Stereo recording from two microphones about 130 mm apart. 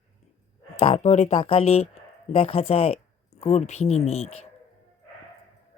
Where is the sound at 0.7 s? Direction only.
60° left (ahead or behind).